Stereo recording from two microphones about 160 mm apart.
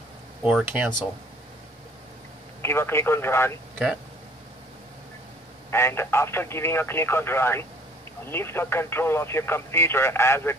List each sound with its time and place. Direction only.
0.4 s speech: 5° right (ahead or behind)
2.6 s speech: 15° left (ahead or behind)
3.7 s speech: 5° right (ahead or behind)
5.7 s speech: 15° left (ahead or behind)